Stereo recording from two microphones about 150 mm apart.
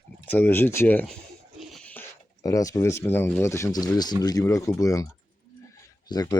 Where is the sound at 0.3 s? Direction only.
10° left (ahead or behind).